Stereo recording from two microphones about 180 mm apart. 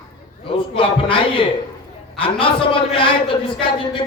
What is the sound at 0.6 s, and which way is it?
A man's voice, 30° left (ahead or behind).